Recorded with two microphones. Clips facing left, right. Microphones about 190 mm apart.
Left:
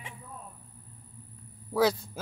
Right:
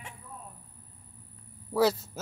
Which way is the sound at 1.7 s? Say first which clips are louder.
Even; 5° right (ahead or behind).